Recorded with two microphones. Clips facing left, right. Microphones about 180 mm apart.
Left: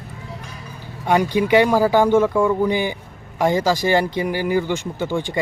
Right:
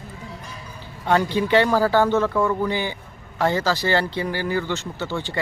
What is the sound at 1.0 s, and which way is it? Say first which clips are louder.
Speech: left 3 dB; 15° left (ahead or behind).